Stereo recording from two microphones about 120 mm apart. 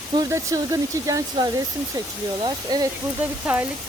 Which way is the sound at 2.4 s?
35° right (ahead or behind).